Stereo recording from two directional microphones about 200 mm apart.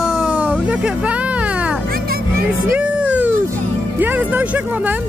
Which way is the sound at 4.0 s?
10° right (ahead or behind).